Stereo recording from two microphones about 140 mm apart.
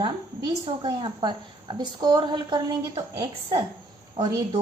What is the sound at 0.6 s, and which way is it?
A woman's voice, 35° right (ahead or behind).